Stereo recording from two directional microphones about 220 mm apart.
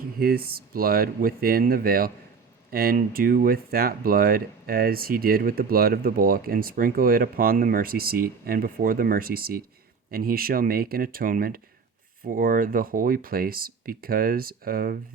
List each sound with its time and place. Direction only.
0.2 s speech: 45° right (ahead or behind)